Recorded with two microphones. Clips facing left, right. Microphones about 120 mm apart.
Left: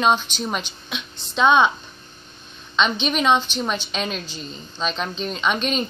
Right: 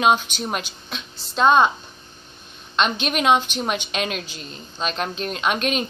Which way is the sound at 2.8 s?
5° right (ahead or behind).